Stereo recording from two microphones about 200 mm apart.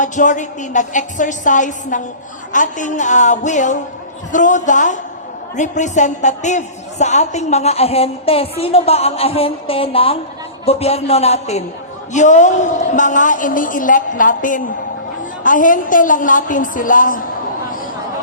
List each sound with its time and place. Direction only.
0.0 s a woman's voice: 40° left (ahead or behind)